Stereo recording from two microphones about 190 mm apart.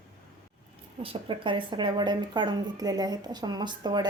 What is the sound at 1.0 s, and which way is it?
A woman's voice, 30° right (ahead or behind).